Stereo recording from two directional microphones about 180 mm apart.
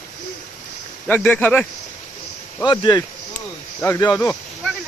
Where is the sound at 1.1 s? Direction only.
10° left (ahead or behind).